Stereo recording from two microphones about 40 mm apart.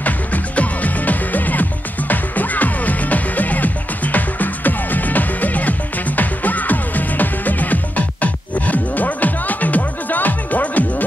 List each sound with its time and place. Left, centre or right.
0.0 s music: left